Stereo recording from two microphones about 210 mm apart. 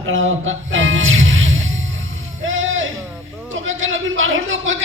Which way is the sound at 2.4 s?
70° right (ahead or behind).